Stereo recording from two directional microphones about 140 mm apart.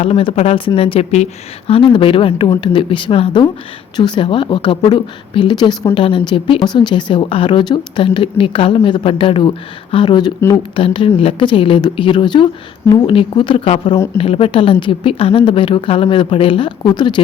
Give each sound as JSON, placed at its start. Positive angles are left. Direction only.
{"t": 0.0, "sound": "speech", "side_deg": 45}